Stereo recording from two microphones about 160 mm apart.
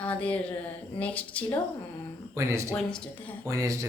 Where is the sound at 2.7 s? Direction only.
5° left (ahead or behind).